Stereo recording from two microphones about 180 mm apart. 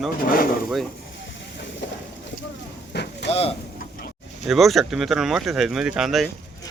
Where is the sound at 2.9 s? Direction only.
65° left (ahead or behind).